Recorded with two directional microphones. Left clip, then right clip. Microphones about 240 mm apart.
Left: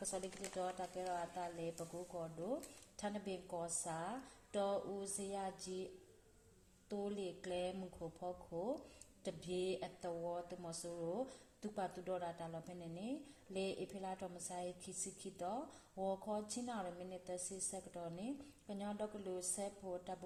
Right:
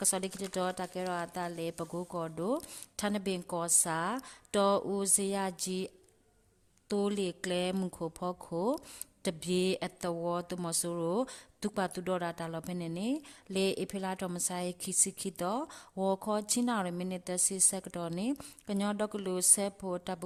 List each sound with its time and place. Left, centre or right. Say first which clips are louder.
0.0 s a woman's voice: right 11 dB; right
6.8 s a woman's voice: right 12 dB; right